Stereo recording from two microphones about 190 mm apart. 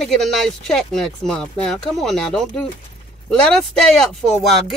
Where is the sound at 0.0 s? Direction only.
Centre (ahead or behind).